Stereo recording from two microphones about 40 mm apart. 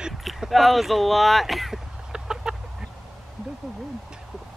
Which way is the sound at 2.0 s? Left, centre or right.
Centre.